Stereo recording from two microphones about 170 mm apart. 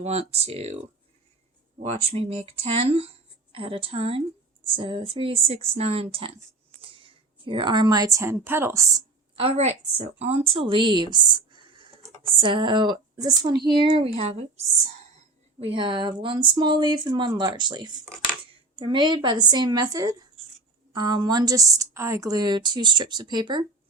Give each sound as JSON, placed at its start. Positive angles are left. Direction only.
{"t": 0.0, "sound": "a woman's voice", "side_deg": -40}
{"t": 1.8, "sound": "a woman's voice", "side_deg": -40}
{"t": 9.3, "sound": "a woman's voice", "side_deg": -30}
{"t": 15.6, "sound": "a woman's voice", "side_deg": -30}